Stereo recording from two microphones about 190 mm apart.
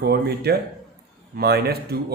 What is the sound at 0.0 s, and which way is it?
Speech, 55° right (ahead or behind).